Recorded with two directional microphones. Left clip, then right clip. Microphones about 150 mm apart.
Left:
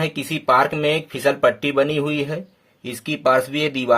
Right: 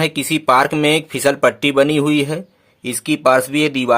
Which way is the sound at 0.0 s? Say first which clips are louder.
Right 6 dB; 35° right (ahead or behind).